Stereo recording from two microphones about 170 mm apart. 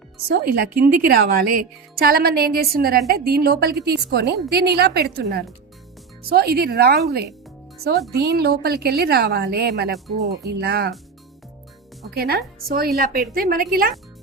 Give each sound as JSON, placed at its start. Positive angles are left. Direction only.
{"t": 0.3, "sound": "a woman's voice", "side_deg": -60}
{"t": 8.1, "sound": "a woman's voice", "side_deg": -70}
{"t": 12.1, "sound": "a woman's voice", "side_deg": -65}